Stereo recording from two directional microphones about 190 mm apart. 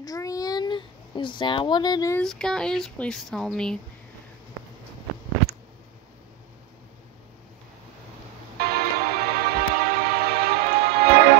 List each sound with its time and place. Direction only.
0.0 s a sound: 20° left (ahead or behind)
2.2 s speech: 5° left (ahead or behind)
8.5 s music: 55° right (ahead or behind)